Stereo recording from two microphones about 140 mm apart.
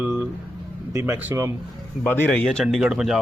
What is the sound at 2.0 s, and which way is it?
Speech, 10° left (ahead or behind).